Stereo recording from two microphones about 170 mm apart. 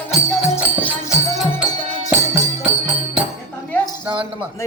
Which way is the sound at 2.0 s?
15° right (ahead or behind).